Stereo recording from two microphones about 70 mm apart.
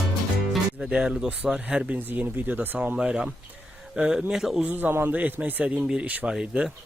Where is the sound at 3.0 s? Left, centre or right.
Centre.